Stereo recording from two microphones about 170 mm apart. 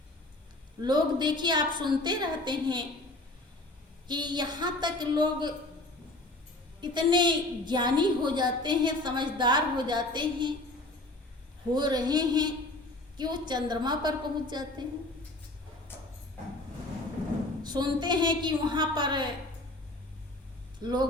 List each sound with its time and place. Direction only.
0.8 s a woman's voice: 25° right (ahead or behind)
4.1 s a woman's voice: 25° right (ahead or behind)
6.8 s a woman's voice: 25° right (ahead or behind)
11.7 s a woman's voice: 25° right (ahead or behind)
17.6 s a woman's voice: 25° right (ahead or behind)
20.8 s a woman's voice: 25° right (ahead or behind)